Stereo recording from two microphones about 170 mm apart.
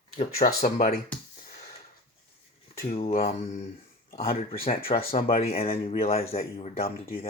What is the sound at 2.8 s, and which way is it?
Speech, 35° left (ahead or behind).